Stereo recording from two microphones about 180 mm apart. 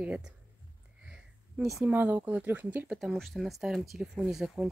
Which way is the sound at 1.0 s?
5° right (ahead or behind).